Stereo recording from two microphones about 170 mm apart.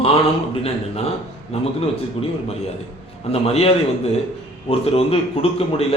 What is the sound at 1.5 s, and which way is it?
Speech, 40° left (ahead or behind).